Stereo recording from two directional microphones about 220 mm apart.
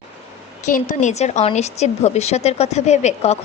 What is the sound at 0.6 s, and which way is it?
A woman's voice, 35° left (ahead or behind).